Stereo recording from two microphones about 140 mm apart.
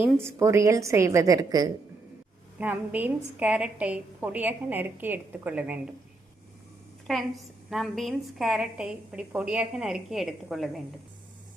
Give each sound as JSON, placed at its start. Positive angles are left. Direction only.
{"t": 0.0, "sound": "a woman's voice", "side_deg": -20}
{"t": 2.6, "sound": "a woman's voice", "side_deg": -15}
{"t": 7.1, "sound": "a woman's voice", "side_deg": 0}